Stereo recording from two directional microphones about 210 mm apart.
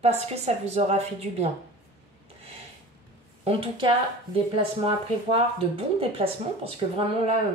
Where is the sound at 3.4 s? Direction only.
25° right (ahead or behind).